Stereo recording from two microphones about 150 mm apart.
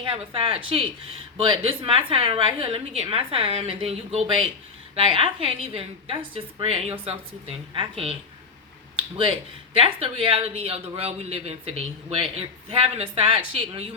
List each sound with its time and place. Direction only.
0.0 s speech: 35° right (ahead or behind)
9.0 s a sound: 35° right (ahead or behind)
9.7 s speech: 40° right (ahead or behind)